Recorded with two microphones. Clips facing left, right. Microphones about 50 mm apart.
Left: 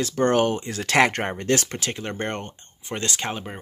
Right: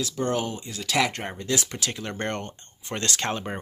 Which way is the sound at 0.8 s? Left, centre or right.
Left.